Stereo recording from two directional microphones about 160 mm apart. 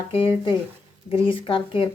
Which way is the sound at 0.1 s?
35° left (ahead or behind).